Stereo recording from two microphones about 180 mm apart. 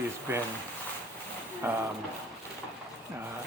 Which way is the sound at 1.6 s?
10° right (ahead or behind).